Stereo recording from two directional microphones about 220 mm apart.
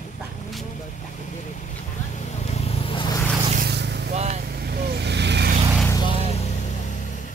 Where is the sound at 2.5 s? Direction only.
30° left (ahead or behind).